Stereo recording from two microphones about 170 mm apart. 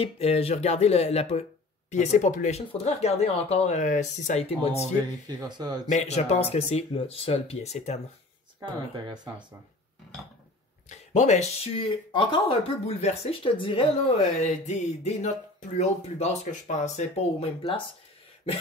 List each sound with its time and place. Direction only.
0.0 s speech: 35° left (ahead or behind)
5.2 s speech: 25° right (ahead or behind)
5.9 s speech: 40° left (ahead or behind)
8.9 s speech: 25° right (ahead or behind)
10.9 s speech: 45° left (ahead or behind)
14.5 s music: 45° left (ahead or behind)
15.8 s speech: 40° left (ahead or behind)